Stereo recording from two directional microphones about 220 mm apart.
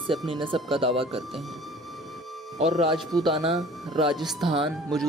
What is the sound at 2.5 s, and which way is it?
Speech, 30° right (ahead or behind).